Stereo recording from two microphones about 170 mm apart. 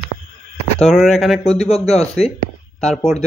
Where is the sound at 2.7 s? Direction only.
5° left (ahead or behind).